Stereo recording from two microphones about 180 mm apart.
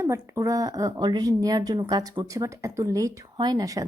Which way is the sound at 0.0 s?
15° right (ahead or behind).